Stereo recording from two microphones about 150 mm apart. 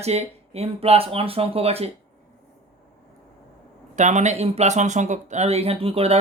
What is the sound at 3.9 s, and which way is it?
Speech, 55° right (ahead or behind).